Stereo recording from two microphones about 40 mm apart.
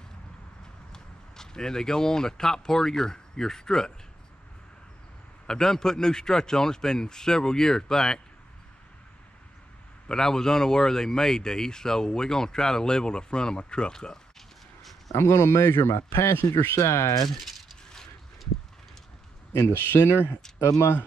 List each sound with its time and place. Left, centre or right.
0.9 s speech: centre
5.5 s speech: centre
10.0 s speech: centre
14.8 s a sound: centre
15.1 s speech: left
17.3 s a sound: centre
19.6 s speech: left